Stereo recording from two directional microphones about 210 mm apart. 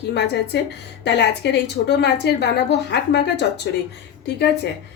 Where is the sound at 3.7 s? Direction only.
50° left (ahead or behind).